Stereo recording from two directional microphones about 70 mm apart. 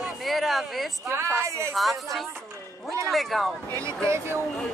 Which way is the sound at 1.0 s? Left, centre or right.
Right.